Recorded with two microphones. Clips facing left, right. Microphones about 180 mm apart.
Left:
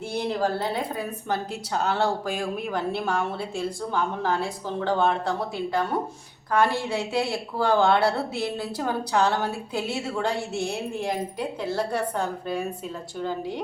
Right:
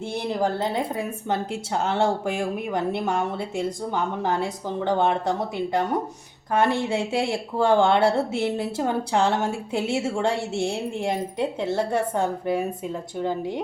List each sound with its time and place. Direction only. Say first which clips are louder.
0.1 s speech: even; 20° right (ahead or behind)